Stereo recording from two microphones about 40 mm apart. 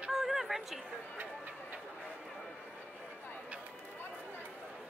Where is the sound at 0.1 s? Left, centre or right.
Centre.